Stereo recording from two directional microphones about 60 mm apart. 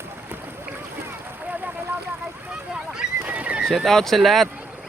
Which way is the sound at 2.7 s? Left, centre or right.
Centre.